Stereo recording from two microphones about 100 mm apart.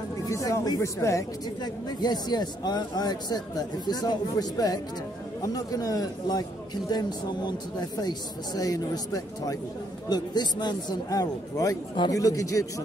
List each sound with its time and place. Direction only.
0.3 s a man's voice: 35° left (ahead or behind)
1.6 s a man's voice: 45° left (ahead or behind)